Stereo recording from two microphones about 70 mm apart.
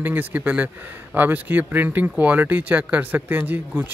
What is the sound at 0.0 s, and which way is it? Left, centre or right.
Speech, right.